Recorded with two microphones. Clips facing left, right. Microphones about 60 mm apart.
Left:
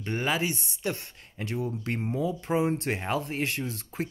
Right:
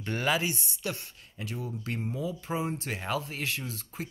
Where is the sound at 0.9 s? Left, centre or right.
Left.